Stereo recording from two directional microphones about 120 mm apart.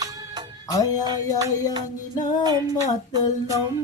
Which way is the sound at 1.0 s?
35° right (ahead or behind).